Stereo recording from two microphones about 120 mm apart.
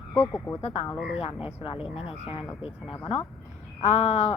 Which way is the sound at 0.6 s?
55° left (ahead or behind).